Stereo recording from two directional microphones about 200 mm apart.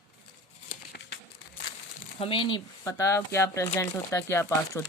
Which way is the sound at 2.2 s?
25° left (ahead or behind).